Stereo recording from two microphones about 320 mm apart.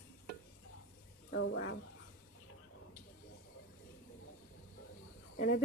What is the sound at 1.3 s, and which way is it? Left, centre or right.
Speech, left.